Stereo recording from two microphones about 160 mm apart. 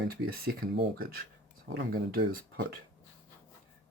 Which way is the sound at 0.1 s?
80° right.